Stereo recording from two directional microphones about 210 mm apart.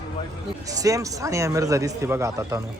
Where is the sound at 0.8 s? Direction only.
15° right (ahead or behind).